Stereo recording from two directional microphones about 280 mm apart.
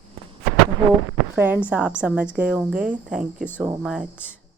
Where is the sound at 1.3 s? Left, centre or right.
Centre.